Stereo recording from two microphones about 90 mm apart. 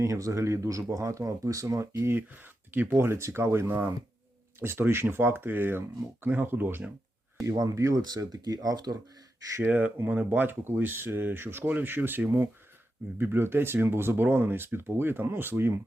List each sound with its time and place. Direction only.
0.0 s speech: 35° right (ahead or behind); by 6.9 s 20° right (ahead or behind)
7.4 s speech: 40° right (ahead or behind)
8.0 s speech: 45° right (ahead or behind)
9.6 s speech: 15° right (ahead or behind)